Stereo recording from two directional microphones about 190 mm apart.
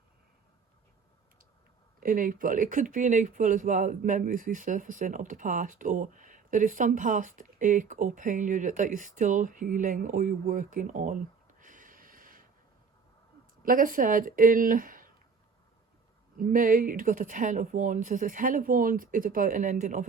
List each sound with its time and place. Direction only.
2.0 s speech: 45° right (ahead or behind)
13.6 s speech: 45° right (ahead or behind)
16.4 s speech: 45° right (ahead or behind)